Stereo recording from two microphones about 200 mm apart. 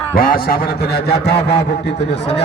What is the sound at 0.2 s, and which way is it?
A man's voice, 45° left (ahead or behind).